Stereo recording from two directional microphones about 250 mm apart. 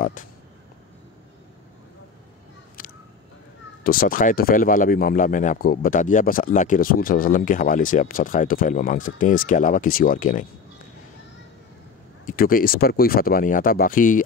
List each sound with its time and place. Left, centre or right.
2.8 s a sound: left
3.8 s speech: left
12.3 s speech: left